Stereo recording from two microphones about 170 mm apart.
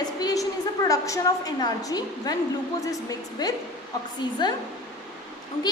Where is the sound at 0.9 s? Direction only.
20° left (ahead or behind).